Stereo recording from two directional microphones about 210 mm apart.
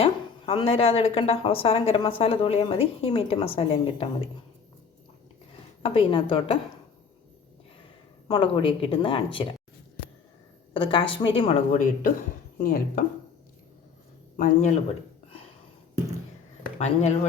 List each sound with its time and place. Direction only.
0.0 s speech: 25° left (ahead or behind)
5.8 s speech: 25° left (ahead or behind)
8.3 s speech: 25° left (ahead or behind)
10.8 s speech: 25° left (ahead or behind); by 13.1 s 45° left (ahead or behind)
14.3 s speech: 40° left (ahead or behind)
16.7 s speech: 30° left (ahead or behind)